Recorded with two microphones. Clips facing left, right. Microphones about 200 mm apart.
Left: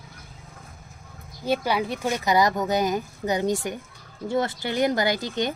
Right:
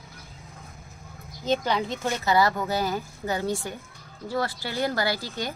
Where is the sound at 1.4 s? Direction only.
10° left (ahead or behind).